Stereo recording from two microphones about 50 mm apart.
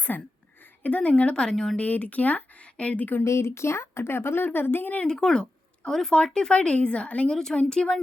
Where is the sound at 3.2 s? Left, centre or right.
Left.